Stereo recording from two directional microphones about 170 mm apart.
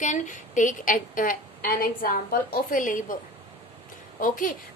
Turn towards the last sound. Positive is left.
turn(degrees=55)  # may be behind; listen again after turning